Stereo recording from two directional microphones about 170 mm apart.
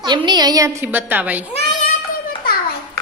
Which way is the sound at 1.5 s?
40° left (ahead or behind).